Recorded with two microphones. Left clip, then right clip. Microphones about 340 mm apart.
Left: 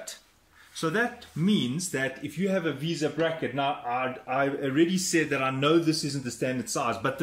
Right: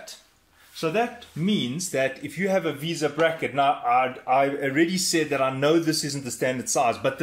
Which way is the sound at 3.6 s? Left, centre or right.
Right.